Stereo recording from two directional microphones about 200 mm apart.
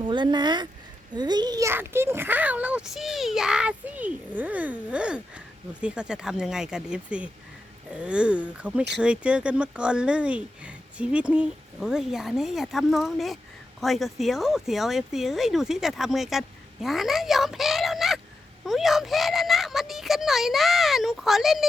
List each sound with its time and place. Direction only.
0.0 s a child's voice: 20° right (ahead or behind); by 21.7 s centre (ahead or behind)